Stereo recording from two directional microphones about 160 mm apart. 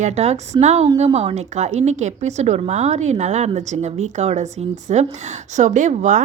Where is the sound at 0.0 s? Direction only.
45° right (ahead or behind).